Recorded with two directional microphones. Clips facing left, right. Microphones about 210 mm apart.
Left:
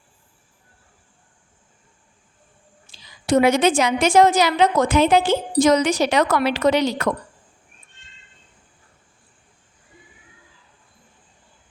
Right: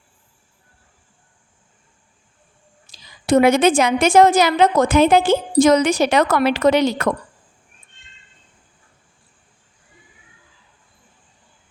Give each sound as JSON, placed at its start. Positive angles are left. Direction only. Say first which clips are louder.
{"t": 2.8, "sound": "a woman's voice", "louder": "right 2 dB", "side_deg": -45}